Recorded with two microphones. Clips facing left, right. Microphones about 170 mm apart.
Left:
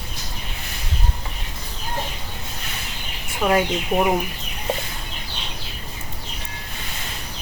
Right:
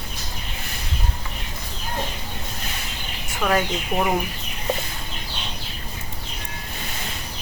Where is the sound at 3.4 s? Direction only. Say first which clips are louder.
Left 3 dB; 15° left (ahead or behind).